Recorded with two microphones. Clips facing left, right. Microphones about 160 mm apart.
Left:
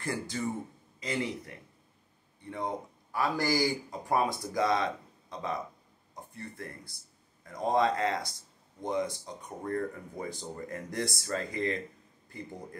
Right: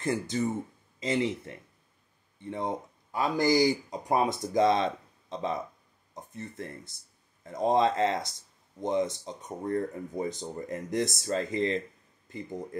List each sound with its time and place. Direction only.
0.0 s speech: 20° right (ahead or behind)